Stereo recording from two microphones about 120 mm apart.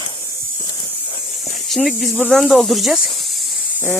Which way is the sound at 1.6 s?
Centre (ahead or behind).